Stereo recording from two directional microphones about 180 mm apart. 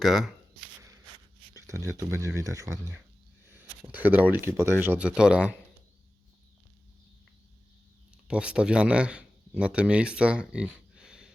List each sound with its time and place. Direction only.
0.0 s speech: centre (ahead or behind)
1.5 s speech: 15° right (ahead or behind)
8.3 s speech: 5° right (ahead or behind)
10.5 s a sound: 5° right (ahead or behind)